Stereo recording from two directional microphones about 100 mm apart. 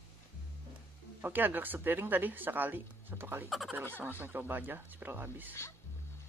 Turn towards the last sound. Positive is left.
turn(degrees=-20)  # may be behind; listen again after turning